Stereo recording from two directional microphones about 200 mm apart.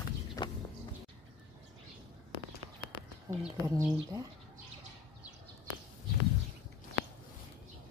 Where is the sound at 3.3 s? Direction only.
15° right (ahead or behind).